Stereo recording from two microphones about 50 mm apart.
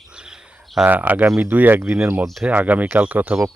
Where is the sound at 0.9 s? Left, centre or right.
Right.